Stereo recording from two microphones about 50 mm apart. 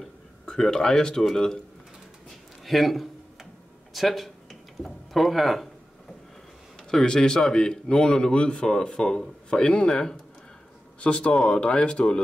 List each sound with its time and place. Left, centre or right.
0.5 s a man's voice: centre
2.6 s speech: centre
3.9 s a sound: centre
6.8 s a man's voice: centre
11.0 s speech: left